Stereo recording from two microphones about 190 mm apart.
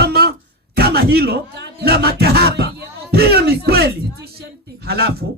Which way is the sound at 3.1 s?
55° right (ahead or behind).